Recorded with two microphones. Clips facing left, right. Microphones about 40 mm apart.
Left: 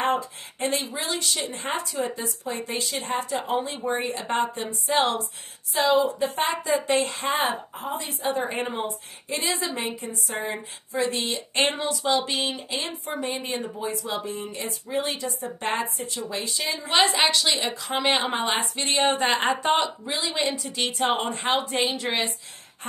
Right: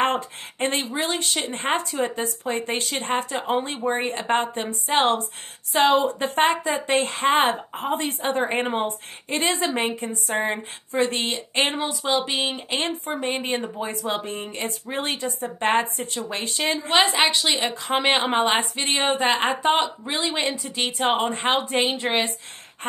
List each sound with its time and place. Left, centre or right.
0.0 s a woman's voice: right
5.7 s a woman's voice: right
11.5 s speech: centre
11.8 s speech: right
12.7 s a woman's voice: right
16.9 s speech: right
18.9 s a woman's voice: centre
20.1 s speech: right
20.7 s speech: right
21.2 s speech: right